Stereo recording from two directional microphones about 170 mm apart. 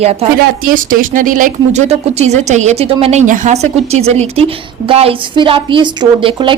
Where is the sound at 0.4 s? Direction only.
55° right (ahead or behind).